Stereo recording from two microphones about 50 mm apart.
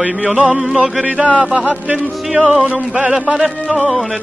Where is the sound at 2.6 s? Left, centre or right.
Right.